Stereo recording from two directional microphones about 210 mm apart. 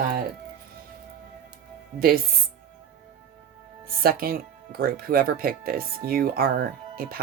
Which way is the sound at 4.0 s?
45° right (ahead or behind).